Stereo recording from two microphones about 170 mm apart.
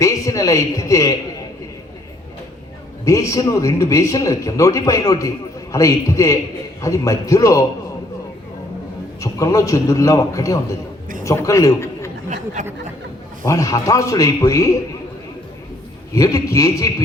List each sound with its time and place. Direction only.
0.0 s a man's voice: 20° left (ahead or behind)
3.0 s a man's voice: 20° left (ahead or behind)
9.2 s a man's voice: 20° left (ahead or behind)
12.6 s speech: 45° right (ahead or behind)
13.4 s a man's voice: 20° left (ahead or behind)
16.1 s a man's voice: 20° left (ahead or behind)